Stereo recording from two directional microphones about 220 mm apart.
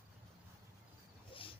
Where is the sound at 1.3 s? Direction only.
25° left (ahead or behind).